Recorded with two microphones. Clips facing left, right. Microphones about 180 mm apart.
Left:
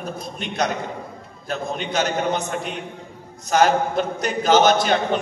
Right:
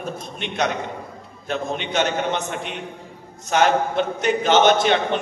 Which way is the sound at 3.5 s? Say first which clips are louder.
Left 1 dB; 40° left (ahead or behind).